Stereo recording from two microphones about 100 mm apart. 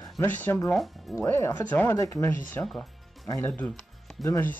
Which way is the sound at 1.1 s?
25° left (ahead or behind).